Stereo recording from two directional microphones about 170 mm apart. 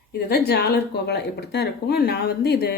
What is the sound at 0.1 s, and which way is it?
Speech, 70° left (ahead or behind).